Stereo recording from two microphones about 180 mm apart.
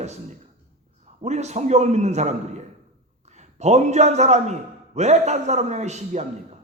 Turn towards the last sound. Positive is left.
turn(degrees=-40)  # may be behind; listen again after turning